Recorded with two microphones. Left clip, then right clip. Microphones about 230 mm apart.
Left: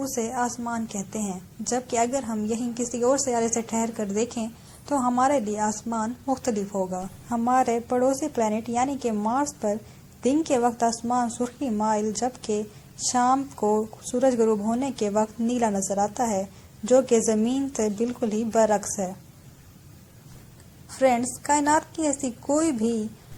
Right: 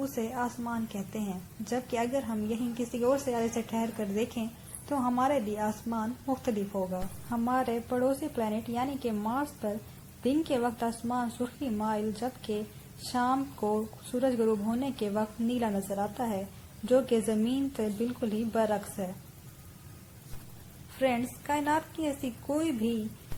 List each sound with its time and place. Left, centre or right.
0.0 s a woman's voice: left
21.0 s a woman's voice: left